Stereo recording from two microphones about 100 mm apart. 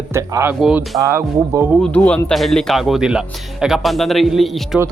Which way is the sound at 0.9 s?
40° right (ahead or behind).